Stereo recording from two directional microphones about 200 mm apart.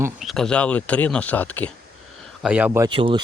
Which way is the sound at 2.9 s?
25° right (ahead or behind).